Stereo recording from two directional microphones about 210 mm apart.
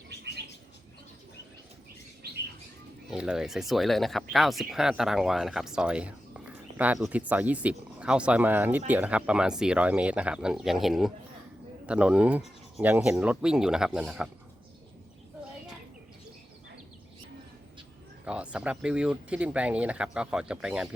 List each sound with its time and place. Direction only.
2.2 s bird: 50° right (ahead or behind)
3.1 s speech: 5° right (ahead or behind)
18.3 s speech: 5° right (ahead or behind)